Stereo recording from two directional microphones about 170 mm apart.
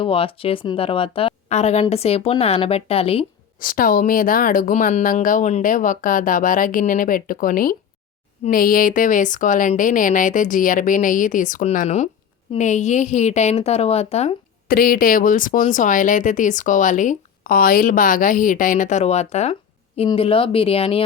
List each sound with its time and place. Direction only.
0.0 s a woman's voice: 30° left (ahead or behind)
3.6 s a woman's voice: 55° left (ahead or behind); by 14.3 s 40° left (ahead or behind)
14.7 s a woman's voice: 60° left (ahead or behind); by 21.0 s 35° left (ahead or behind)